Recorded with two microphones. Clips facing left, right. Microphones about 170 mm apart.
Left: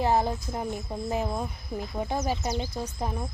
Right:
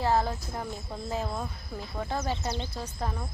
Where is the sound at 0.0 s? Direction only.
15° left (ahead or behind).